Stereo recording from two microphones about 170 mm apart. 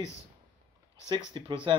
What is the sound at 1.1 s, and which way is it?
Speech, 25° right (ahead or behind).